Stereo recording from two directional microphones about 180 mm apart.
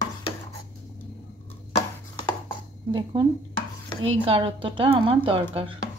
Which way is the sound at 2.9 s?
25° right (ahead or behind).